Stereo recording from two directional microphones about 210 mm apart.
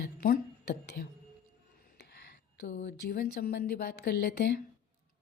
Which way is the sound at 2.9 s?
50° left (ahead or behind).